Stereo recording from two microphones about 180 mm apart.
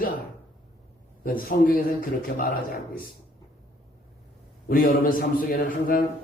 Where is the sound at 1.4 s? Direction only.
55° left (ahead or behind).